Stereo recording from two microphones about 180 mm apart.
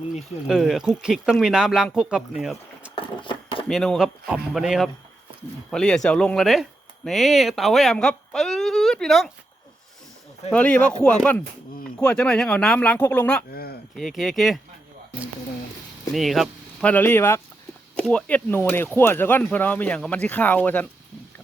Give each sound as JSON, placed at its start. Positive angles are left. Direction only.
{"t": 0.4, "sound": "speech", "side_deg": 0}
{"t": 2.9, "sound": "a sound", "side_deg": 30}
{"t": 3.7, "sound": "speech", "side_deg": 0}
{"t": 10.5, "sound": "speech", "side_deg": 5}
{"t": 13.5, "sound": "a sound", "side_deg": 60}
{"t": 13.9, "sound": "speech", "side_deg": 0}
{"t": 16.1, "sound": "speech", "side_deg": 0}